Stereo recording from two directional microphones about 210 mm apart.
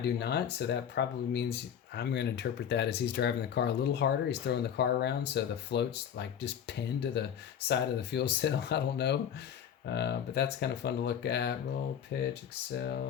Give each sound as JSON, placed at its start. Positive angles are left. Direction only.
{"t": 0.0, "sound": "speech", "side_deg": 50}